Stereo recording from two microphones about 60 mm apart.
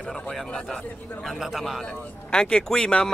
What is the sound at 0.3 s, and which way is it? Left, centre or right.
Speech, centre.